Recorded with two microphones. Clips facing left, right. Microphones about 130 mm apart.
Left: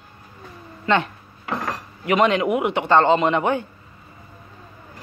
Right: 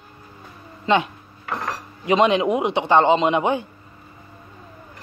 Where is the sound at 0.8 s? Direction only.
15° right (ahead or behind).